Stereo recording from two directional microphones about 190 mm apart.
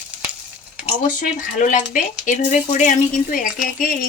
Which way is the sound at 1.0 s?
45° left (ahead or behind).